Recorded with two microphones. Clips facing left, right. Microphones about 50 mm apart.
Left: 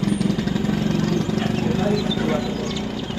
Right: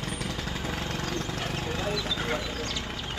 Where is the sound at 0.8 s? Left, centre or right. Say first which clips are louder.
Left 11 dB; left.